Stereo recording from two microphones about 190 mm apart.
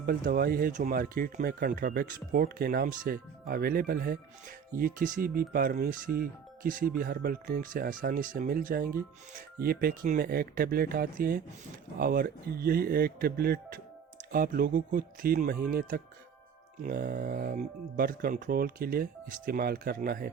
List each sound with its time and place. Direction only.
0.0 s speech: 55° right (ahead or behind)